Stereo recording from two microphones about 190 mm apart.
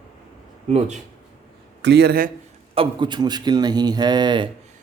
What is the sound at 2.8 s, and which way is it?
A man's voice, 25° right (ahead or behind).